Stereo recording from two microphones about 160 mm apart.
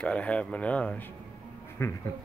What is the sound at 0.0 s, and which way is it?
Speech, 10° left (ahead or behind).